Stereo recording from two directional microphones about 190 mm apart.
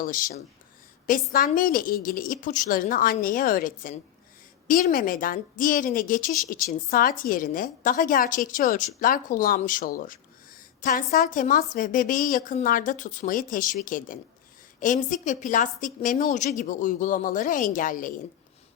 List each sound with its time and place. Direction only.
0.0 s a woman's voice: 45° left (ahead or behind)